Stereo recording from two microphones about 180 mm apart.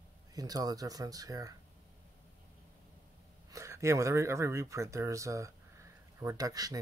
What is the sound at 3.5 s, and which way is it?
Speech, 15° right (ahead or behind).